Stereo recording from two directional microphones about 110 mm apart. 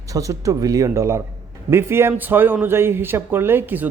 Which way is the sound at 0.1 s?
30° right (ahead or behind).